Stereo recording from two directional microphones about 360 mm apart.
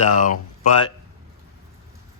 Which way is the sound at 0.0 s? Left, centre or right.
Left.